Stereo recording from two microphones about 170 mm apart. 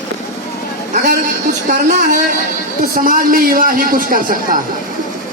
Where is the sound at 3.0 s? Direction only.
55° right (ahead or behind).